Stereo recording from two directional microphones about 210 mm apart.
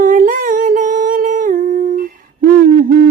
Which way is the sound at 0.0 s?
40° right (ahead or behind).